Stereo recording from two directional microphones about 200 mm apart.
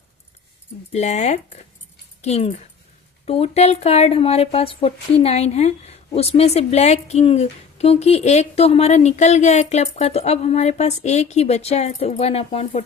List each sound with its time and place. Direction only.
0.9 s speech: 35° left (ahead or behind)